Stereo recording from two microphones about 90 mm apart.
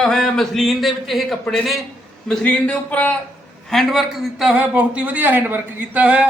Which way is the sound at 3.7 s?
Centre (ahead or behind).